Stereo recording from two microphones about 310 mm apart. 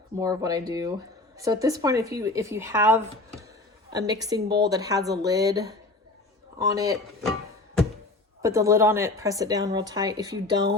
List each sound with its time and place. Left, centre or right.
0.2 s speech: centre
4.4 s a woman's voice: right
4.7 s speech: centre
8.4 s speech: centre